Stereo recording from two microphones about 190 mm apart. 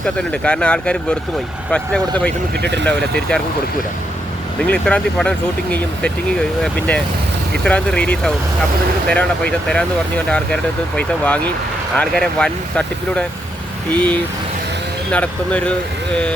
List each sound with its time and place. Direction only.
0.0 s speech: 5° left (ahead or behind)
2.6 s speech: 65° right (ahead or behind)
2.8 s speech: 5° left (ahead or behind)
4.6 s speech: 5° left (ahead or behind)
6.6 s speech: 5° left (ahead or behind)